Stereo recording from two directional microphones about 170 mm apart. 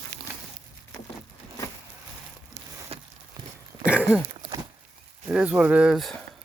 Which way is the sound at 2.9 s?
35° right (ahead or behind).